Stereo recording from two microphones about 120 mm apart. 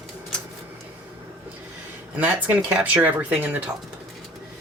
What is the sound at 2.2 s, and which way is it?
Speech, 15° right (ahead or behind).